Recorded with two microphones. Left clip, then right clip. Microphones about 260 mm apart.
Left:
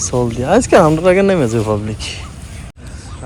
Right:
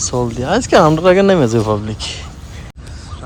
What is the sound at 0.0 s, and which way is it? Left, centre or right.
Speech, centre.